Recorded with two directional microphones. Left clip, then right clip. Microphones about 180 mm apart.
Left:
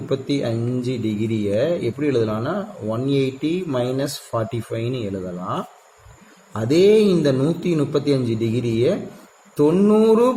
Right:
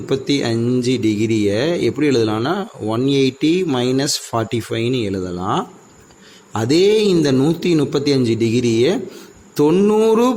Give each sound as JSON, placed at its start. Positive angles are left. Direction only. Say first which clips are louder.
{"t": 0.1, "sound": "speech", "louder": "right 4 dB", "side_deg": -45}